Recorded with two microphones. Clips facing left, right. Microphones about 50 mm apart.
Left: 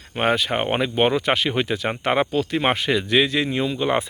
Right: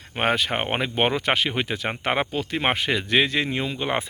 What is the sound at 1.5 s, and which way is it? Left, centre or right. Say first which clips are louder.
Speech: left 3 dB; centre.